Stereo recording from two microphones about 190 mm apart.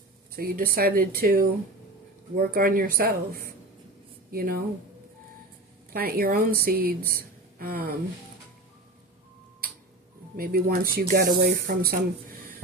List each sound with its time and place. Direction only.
0.3 s speech: 50° right (ahead or behind)
5.9 s speech: 50° right (ahead or behind)
10.3 s speech: 50° right (ahead or behind)